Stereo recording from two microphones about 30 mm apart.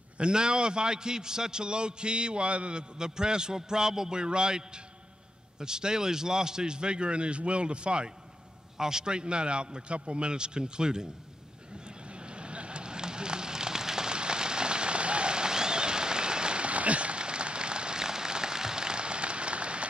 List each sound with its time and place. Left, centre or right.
0.2 s a man's voice: right
8.7 s a man's voice: centre
9.1 s a man's voice: right
12.1 s fire: right